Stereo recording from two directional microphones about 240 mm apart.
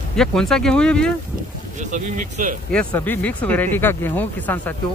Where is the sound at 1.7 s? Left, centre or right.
Right.